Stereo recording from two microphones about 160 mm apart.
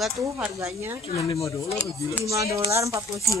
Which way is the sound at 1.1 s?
20° left (ahead or behind).